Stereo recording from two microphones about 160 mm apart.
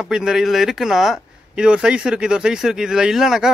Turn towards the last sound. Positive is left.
turn(degrees=0)  # may be behind; listen again after turning